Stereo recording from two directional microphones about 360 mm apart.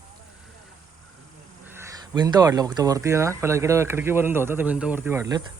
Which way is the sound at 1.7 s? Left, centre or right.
Centre.